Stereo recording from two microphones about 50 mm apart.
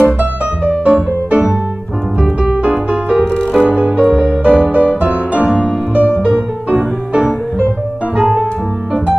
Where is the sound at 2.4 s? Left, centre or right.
Right.